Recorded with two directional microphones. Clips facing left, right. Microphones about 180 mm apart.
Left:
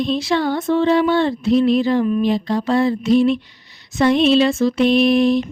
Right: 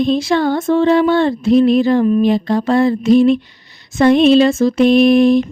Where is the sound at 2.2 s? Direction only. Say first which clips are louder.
Right 4 dB; 55° right (ahead or behind).